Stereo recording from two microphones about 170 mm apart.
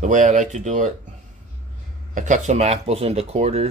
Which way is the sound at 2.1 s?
45° right (ahead or behind).